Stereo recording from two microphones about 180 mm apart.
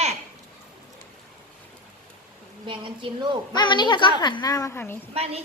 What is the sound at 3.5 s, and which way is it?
A woman's voice, 25° left (ahead or behind).